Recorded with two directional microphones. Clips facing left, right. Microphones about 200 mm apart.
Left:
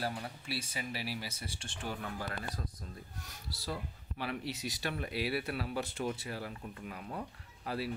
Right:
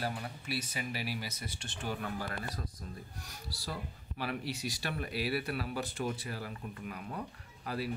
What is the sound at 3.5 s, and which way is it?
Speech, 20° left (ahead or behind).